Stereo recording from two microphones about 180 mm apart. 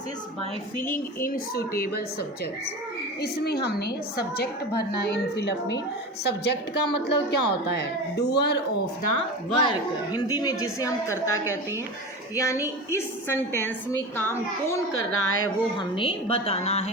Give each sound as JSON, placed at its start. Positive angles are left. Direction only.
{"t": 1.2, "sound": "a woman's voice", "side_deg": 55}
{"t": 3.2, "sound": "a woman's voice", "side_deg": 65}
{"t": 5.0, "sound": "a woman's voice", "side_deg": 70}
{"t": 9.1, "sound": "a woman's voice", "side_deg": 30}
{"t": 10.2, "sound": "a woman's voice", "side_deg": 20}
{"t": 14.9, "sound": "speech", "side_deg": 90}
{"t": 16.0, "sound": "a woman's voice", "side_deg": 30}